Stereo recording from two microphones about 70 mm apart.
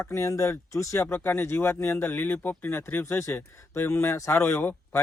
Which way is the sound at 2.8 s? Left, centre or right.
Left.